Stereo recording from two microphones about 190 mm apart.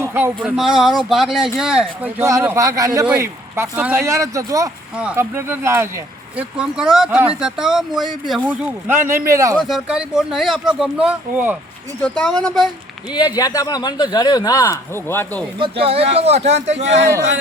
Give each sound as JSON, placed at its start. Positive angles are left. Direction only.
{"t": 0.0, "sound": "speech", "side_deg": -10}
{"t": 2.2, "sound": "speech", "side_deg": -15}
{"t": 9.6, "sound": "speech", "side_deg": 0}
{"t": 12.0, "sound": "speech", "side_deg": 5}
{"t": 13.1, "sound": "a man's voice", "side_deg": 20}
{"t": 15.5, "sound": "speech", "side_deg": -30}